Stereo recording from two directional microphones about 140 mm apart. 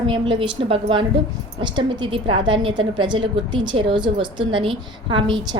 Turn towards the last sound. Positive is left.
turn(degrees=-35)  # may be behind; listen again after turning